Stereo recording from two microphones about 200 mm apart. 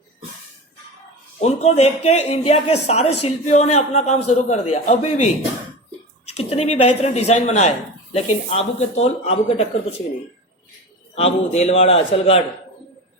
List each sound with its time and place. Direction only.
1.4 s a man's voice: 35° left (ahead or behind)
11.1 s a man's voice: 30° left (ahead or behind)